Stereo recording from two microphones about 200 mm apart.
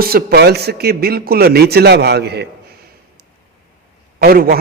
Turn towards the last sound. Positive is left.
turn(degrees=-50)  # may be behind; listen again after turning